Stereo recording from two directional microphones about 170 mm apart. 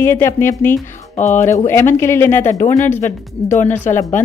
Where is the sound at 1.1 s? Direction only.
45° left (ahead or behind).